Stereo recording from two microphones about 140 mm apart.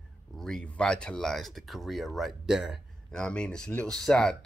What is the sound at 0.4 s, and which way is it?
Speech, 5° left (ahead or behind).